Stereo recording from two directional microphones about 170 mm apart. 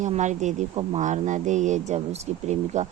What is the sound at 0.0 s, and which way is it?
Speech, 45° right (ahead or behind).